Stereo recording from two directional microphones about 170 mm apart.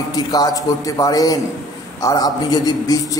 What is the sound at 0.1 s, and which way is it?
A man's voice, 20° left (ahead or behind).